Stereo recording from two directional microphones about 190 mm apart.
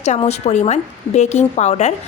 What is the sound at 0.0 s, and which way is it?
A woman's voice, 35° left (ahead or behind).